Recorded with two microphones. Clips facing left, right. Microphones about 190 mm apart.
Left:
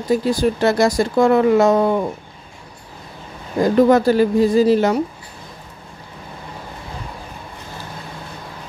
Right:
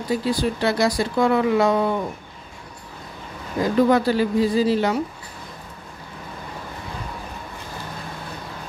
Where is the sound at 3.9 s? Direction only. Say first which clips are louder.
Left 5 dB; 45° left (ahead or behind).